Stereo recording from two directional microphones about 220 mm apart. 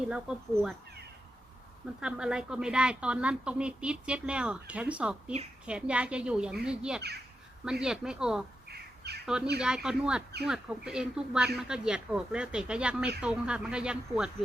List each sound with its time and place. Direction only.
0.1 s speech: 5° right (ahead or behind)
2.0 s speech: 5° right (ahead or behind)
8.7 s crow: 45° right (ahead or behind)
9.2 s speech: 5° right (ahead or behind)